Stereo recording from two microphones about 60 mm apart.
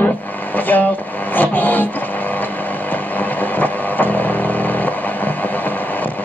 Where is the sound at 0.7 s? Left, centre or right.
Left.